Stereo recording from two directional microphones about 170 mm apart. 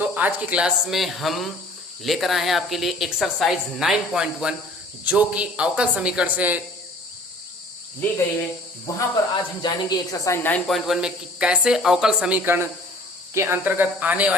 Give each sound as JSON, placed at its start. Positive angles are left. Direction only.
{"t": 0.0, "sound": "a woman's voice", "side_deg": -10}
{"t": 8.9, "sound": "speech", "side_deg": 20}
{"t": 10.7, "sound": "a woman's voice", "side_deg": 0}